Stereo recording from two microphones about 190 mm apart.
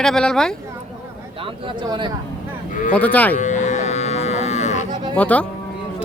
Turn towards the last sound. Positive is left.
turn(degrees=10)  # may be behind; listen again after turning